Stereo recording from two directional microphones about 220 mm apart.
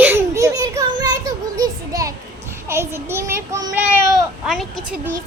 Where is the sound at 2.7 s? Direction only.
10° right (ahead or behind).